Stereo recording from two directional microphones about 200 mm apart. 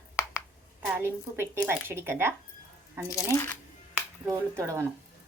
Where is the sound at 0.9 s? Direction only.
10° right (ahead or behind).